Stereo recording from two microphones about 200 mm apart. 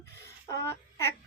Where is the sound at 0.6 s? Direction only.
15° left (ahead or behind).